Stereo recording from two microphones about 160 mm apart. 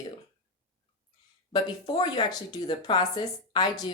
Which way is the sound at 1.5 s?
25° left (ahead or behind).